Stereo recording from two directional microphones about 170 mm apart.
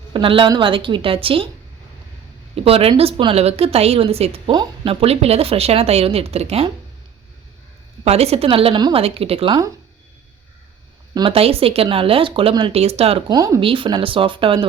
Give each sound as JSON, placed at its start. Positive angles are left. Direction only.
{"t": 0.1, "sound": "a woman's voice", "side_deg": -30}
{"t": 2.6, "sound": "a woman's voice", "side_deg": -35}
{"t": 8.0, "sound": "a woman's voice", "side_deg": -40}
{"t": 11.1, "sound": "a woman's voice", "side_deg": -30}